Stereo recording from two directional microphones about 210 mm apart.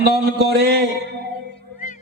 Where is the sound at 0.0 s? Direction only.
50° right (ahead or behind).